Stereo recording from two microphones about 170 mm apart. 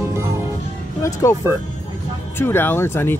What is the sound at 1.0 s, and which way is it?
Speech, 15° left (ahead or behind).